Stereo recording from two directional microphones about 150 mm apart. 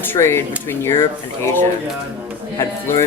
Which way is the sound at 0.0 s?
15° left (ahead or behind).